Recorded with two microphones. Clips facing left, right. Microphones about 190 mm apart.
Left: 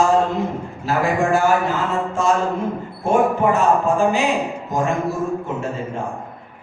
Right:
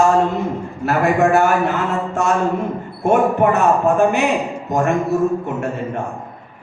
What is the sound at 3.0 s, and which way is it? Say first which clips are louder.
Mantra: right 2 dB; 65° right (ahead or behind).